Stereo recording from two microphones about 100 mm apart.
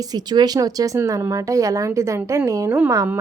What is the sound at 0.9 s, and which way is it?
A woman's voice, 30° right (ahead or behind).